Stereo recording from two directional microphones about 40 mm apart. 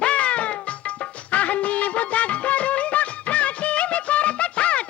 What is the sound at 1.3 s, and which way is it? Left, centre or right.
Music of bollywood, left.